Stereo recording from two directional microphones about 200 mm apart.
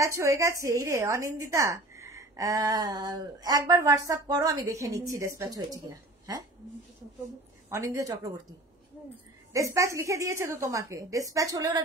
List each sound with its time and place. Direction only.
0.0 s a woman's voice: 15° right (ahead or behind)
7.7 s a woman's voice: 15° right (ahead or behind)
9.5 s a woman's voice: 15° right (ahead or behind)